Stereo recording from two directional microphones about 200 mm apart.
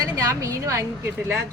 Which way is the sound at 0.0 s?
15° right (ahead or behind).